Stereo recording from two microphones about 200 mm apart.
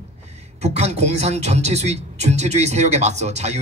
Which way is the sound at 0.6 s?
35° right (ahead or behind).